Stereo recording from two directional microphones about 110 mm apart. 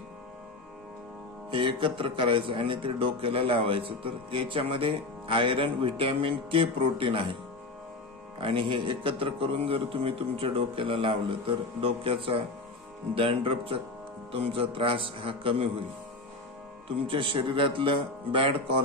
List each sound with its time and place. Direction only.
1.5 s speech: 50° right (ahead or behind)
8.4 s a man's voice: 55° right (ahead or behind)
17.1 s speech: 55° right (ahead or behind)